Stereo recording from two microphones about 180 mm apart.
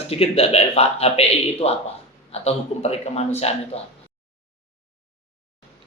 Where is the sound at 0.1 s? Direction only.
35° left (ahead or behind).